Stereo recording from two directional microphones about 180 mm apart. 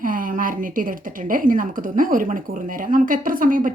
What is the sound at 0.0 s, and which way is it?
A woman's voice, 50° right (ahead or behind).